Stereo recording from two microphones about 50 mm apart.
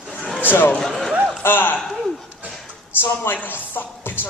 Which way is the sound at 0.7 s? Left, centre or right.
Centre.